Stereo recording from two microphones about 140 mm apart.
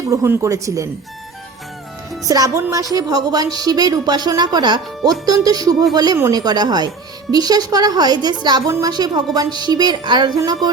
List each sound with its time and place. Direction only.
0.1 s a woman's voice: 20° right (ahead or behind)
2.2 s a woman's voice: 25° right (ahead or behind)